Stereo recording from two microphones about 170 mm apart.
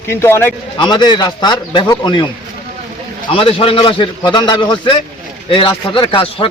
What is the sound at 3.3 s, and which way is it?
A man's voice, 35° left (ahead or behind).